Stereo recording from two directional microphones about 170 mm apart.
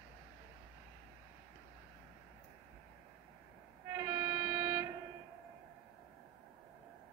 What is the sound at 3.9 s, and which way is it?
Train, 15° right (ahead or behind).